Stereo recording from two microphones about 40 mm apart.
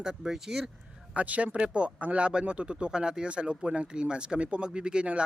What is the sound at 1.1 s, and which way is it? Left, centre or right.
Speech, right.